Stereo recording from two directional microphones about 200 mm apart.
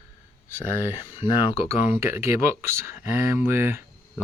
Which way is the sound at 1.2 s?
20° left (ahead or behind).